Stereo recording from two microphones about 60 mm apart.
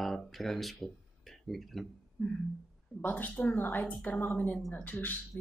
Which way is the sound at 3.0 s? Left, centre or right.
Left.